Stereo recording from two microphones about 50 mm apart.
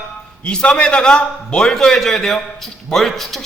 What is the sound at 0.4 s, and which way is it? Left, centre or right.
A man's voice, centre.